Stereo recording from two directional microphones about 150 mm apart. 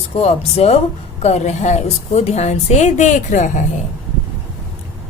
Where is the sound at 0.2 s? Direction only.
45° left (ahead or behind).